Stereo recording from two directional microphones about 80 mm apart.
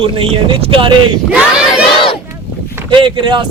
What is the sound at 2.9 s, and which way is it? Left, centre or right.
Speech, right.